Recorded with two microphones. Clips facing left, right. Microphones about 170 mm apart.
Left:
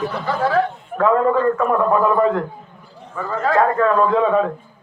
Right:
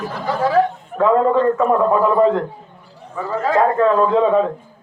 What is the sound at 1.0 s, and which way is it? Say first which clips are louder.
A man's voice: right 2 dB; 20° right (ahead or behind).